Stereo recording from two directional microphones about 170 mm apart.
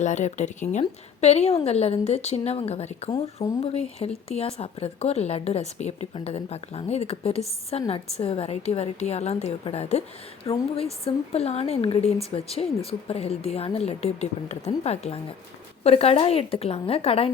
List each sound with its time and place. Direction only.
0.0 s a woman's voice: 45° left (ahead or behind)